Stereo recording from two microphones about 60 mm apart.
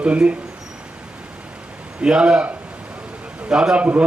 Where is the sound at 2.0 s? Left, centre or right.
Centre.